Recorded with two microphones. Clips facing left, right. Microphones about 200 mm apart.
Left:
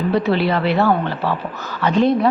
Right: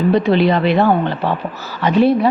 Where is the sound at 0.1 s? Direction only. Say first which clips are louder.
Right 3 dB; 20° right (ahead or behind).